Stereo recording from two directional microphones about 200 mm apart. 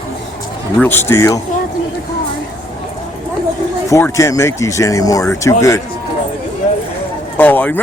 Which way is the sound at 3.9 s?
15° left (ahead or behind).